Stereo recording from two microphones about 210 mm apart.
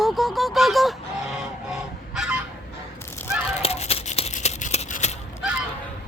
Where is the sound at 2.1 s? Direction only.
5° right (ahead or behind).